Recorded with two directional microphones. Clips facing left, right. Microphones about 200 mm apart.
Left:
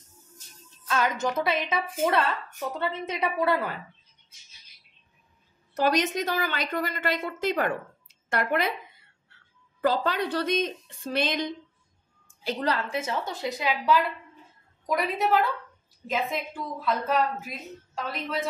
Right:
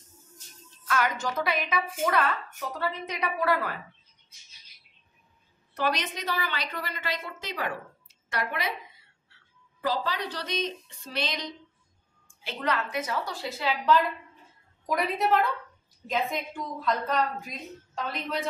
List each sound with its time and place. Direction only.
0.7 s a woman's voice: 25° left (ahead or behind)
5.8 s a woman's voice: 45° left (ahead or behind)
12.3 s a woman's voice: 35° left (ahead or behind); by 14.0 s 10° left (ahead or behind)
14.9 s a woman's voice: centre (ahead or behind)